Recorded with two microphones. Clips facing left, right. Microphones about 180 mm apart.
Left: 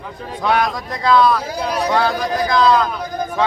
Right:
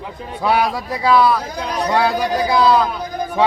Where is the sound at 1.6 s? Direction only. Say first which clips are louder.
Left 1 dB; 5° left (ahead or behind).